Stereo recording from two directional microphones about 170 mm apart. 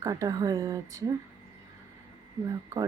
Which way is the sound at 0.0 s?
20° right (ahead or behind).